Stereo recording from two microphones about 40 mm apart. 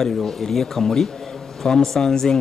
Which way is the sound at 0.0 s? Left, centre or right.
Centre.